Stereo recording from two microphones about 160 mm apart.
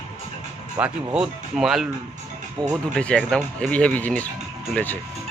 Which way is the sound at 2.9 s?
5° left (ahead or behind).